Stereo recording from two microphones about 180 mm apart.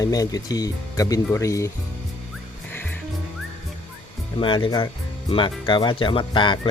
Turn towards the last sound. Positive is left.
turn(degrees=25)  # may be behind; listen again after turning